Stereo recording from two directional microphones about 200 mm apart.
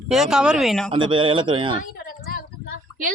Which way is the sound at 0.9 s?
25° right (ahead or behind).